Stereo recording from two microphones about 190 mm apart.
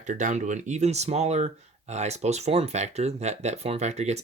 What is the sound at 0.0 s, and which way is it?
Speech, 40° right (ahead or behind).